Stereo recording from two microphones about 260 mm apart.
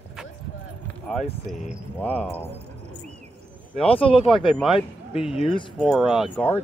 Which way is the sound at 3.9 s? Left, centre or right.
Centre.